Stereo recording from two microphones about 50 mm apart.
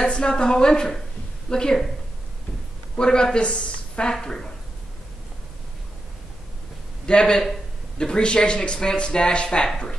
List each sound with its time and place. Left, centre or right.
0.0 s speech: centre
3.0 s speech: centre
7.1 s speech: centre